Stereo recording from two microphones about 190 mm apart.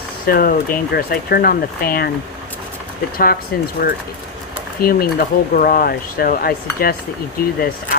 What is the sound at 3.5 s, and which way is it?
Speech, 55° left (ahead or behind).